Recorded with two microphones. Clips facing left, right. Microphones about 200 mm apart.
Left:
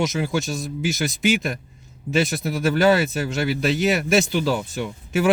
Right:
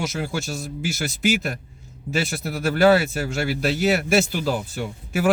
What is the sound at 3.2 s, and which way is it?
Speech, 5° right (ahead or behind).